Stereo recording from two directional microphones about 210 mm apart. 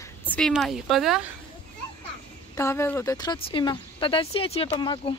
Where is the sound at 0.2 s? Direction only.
10° left (ahead or behind).